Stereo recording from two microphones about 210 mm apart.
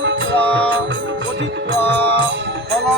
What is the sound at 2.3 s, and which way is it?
Music, 55° right (ahead or behind).